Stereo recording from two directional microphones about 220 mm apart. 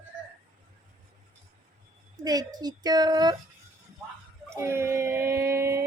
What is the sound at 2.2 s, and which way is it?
Speech, 20° right (ahead or behind).